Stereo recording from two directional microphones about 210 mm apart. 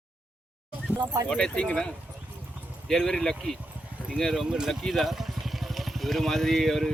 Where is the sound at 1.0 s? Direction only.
20° right (ahead or behind).